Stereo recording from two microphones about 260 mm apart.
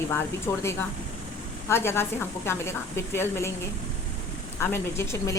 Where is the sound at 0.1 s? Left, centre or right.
Centre.